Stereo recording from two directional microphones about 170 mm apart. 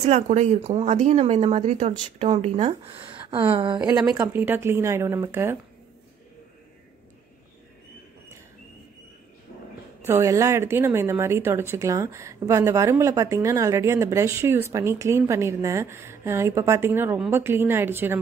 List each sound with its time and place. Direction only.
0.0 s a woman's voice: 40° right (ahead or behind); by 5.6 s 15° right (ahead or behind)
10.0 s a woman's voice: 20° right (ahead or behind)